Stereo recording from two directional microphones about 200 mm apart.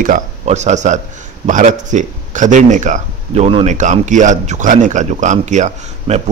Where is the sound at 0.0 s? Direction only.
40° right (ahead or behind).